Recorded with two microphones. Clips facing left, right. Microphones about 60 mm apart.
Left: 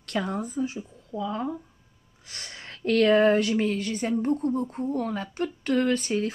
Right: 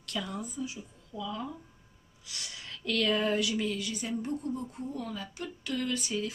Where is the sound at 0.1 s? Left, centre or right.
Left.